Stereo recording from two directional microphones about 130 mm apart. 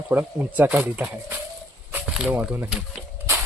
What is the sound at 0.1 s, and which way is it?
Speech, 15° right (ahead or behind).